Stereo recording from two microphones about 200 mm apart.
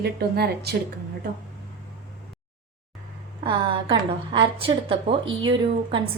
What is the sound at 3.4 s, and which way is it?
A woman's voice, 25° right (ahead or behind).